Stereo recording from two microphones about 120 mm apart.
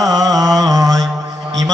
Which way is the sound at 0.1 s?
30° right (ahead or behind).